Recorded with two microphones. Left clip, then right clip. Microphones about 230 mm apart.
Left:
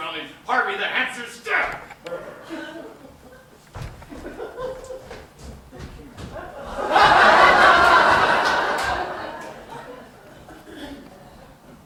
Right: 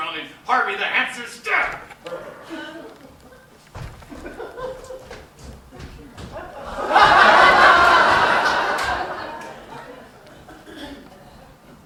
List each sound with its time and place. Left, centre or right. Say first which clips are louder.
0.0 s speech: right 2 dB; centre
4.2 s chuckle: even; right
6.7 s snicker: right 2 dB; centre